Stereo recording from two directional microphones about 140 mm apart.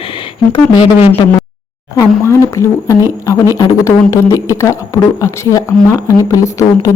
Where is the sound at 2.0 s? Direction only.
20° left (ahead or behind).